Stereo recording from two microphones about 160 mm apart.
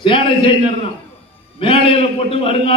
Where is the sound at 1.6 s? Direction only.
35° left (ahead or behind).